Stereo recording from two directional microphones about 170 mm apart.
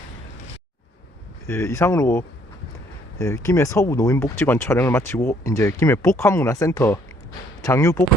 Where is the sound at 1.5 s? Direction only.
15° left (ahead or behind).